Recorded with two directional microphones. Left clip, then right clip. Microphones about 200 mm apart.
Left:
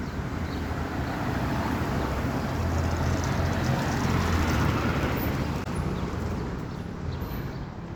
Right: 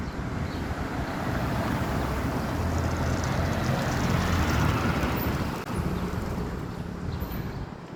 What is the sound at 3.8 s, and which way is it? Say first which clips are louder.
Vehicle: even; 35° right (ahead or behind).